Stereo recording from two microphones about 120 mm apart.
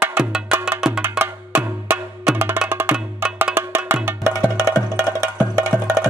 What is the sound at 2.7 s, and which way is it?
Percussion, 20° right (ahead or behind).